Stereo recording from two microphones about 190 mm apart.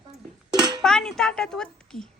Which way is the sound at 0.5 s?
20° right (ahead or behind).